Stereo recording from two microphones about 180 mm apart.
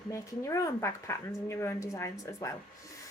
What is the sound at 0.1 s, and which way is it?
Speech, 15° left (ahead or behind).